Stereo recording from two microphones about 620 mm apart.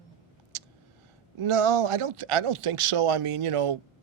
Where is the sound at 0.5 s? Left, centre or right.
Right.